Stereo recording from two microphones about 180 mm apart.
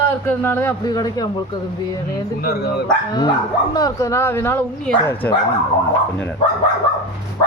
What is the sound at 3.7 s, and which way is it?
A man's voice, 20° left (ahead or behind).